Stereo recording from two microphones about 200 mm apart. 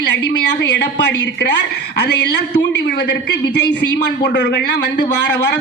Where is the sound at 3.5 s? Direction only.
60° left (ahead or behind).